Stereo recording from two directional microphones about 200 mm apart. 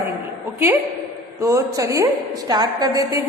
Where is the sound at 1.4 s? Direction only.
15° right (ahead or behind).